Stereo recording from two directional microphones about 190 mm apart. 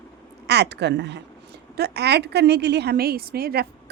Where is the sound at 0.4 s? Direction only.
60° right (ahead or behind).